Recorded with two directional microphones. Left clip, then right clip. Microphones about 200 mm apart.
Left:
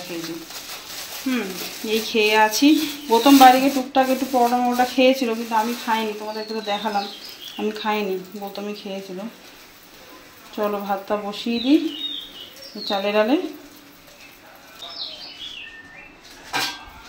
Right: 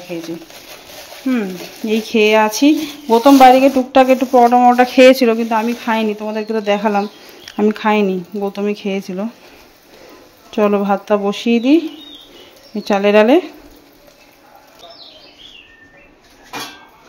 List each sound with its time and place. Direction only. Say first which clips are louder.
1.3 s speech: right 6 dB; 40° right (ahead or behind)
10.5 s speech: right 9 dB; 50° right (ahead or behind)
12.8 s speech: right 9 dB; 50° right (ahead or behind)